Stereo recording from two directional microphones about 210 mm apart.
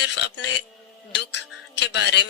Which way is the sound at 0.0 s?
55° left (ahead or behind).